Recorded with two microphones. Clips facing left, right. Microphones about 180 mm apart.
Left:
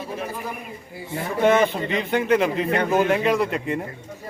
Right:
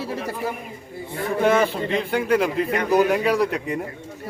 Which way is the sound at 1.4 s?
Centre (ahead or behind).